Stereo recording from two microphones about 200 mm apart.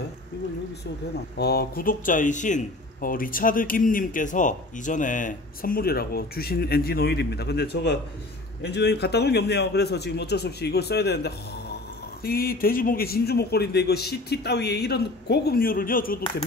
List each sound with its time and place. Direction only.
1.4 s a man's voice: 50° left (ahead or behind)